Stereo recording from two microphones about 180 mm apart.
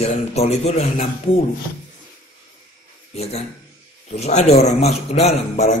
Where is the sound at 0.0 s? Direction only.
35° left (ahead or behind).